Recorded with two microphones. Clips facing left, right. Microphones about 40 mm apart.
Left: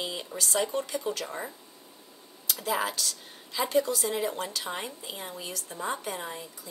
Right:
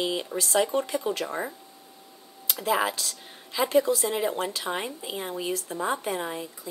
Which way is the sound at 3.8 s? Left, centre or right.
Centre.